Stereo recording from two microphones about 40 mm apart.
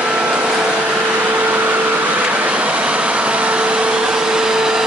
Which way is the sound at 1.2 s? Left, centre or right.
Right.